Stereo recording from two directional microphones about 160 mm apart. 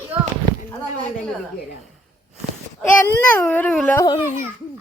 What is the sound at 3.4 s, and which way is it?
Speech, 10° left (ahead or behind).